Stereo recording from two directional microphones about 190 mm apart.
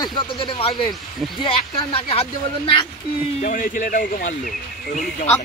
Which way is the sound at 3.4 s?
40° left (ahead or behind).